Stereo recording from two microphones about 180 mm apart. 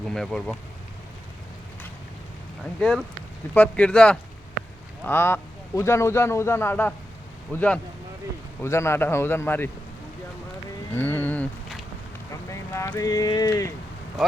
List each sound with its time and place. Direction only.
0.0 s speech: centre (ahead or behind)
3.5 s a man's voice: 10° left (ahead or behind)
10.9 s a sound: 10° left (ahead or behind)
12.3 s speech: 15° left (ahead or behind)
14.2 s speech: centre (ahead or behind)